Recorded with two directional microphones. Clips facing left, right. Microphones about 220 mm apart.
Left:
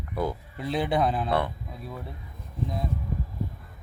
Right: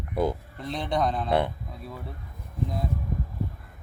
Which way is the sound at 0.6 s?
5° left (ahead or behind).